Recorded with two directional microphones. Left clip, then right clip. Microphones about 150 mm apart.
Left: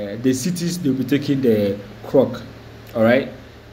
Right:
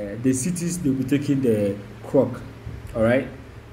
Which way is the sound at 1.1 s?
10° right (ahead or behind).